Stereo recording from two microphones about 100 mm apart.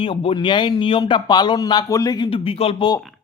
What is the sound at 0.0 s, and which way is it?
Speech, 65° left (ahead or behind).